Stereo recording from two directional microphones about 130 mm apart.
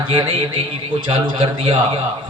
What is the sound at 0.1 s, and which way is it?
A man's voice, 45° right (ahead or behind).